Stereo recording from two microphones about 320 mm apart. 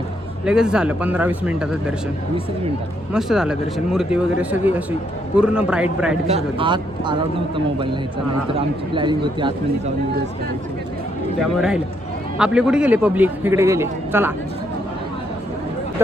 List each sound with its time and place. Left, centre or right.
0.4 s a man's voice: centre
3.1 s a man's voice: centre
6.2 s speech: centre
11.3 s a man's voice: centre
16.0 s speech: centre